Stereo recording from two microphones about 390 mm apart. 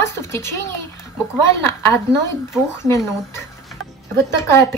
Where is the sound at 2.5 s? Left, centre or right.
Centre.